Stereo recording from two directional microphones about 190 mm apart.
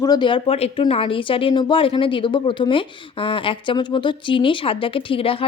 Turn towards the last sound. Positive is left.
turn(degrees=30)  # may be behind; listen again after turning